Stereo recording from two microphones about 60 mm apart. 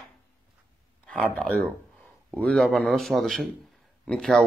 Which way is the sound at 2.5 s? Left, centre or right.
Centre.